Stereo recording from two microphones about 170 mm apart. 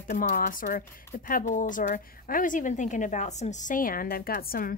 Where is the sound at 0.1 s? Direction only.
55° left (ahead or behind).